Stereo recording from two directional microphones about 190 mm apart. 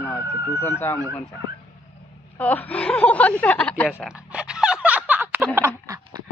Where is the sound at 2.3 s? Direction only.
10° left (ahead or behind).